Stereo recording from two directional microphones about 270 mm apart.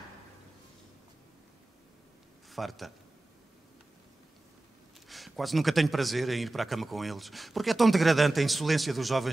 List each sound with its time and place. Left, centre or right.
2.5 s a man's voice: centre
5.0 s a man's voice: centre